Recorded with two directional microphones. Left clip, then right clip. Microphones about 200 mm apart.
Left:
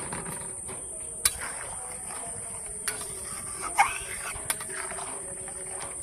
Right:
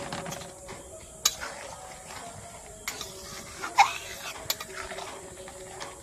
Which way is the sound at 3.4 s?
Centre (ahead or behind).